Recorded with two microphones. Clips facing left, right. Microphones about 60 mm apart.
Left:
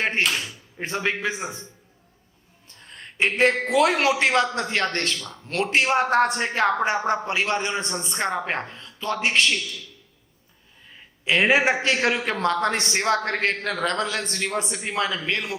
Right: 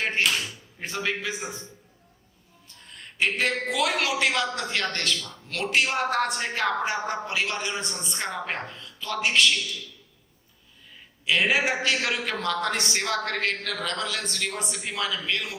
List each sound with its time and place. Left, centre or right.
0.0 s a sound: left
0.8 s a man's voice: left
2.6 s a man's voice: left
11.3 s a man's voice: left